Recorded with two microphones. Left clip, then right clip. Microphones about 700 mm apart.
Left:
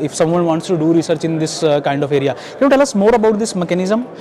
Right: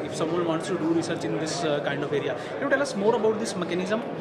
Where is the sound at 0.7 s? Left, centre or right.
Left.